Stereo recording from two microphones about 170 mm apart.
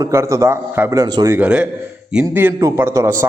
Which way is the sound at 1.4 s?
5° right (ahead or behind).